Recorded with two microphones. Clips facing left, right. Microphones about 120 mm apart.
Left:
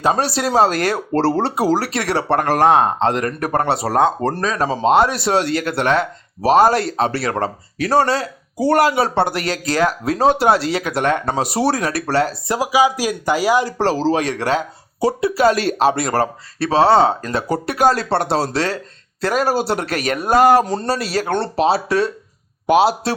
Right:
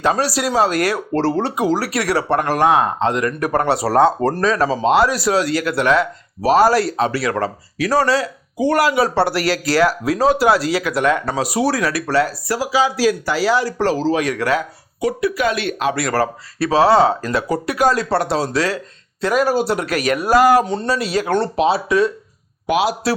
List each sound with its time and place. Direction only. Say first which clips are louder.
0.1 s speech: left 3 dB; 25° left (ahead or behind)
13.7 s speech: even; 35° left (ahead or behind)